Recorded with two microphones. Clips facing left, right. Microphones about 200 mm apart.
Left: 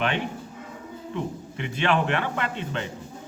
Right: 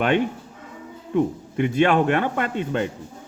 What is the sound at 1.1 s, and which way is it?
A man's voice, 50° right (ahead or behind).